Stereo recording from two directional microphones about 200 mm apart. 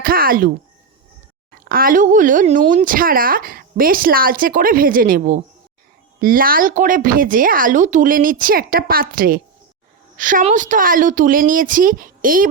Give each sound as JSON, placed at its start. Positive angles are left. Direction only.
{"t": 0.0, "sound": "speech", "side_deg": -45}
{"t": 1.7, "sound": "speech", "side_deg": -45}